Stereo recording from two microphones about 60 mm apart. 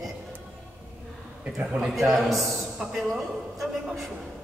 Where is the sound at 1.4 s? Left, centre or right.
Right.